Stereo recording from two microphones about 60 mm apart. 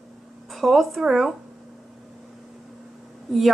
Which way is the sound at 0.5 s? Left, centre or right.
Centre.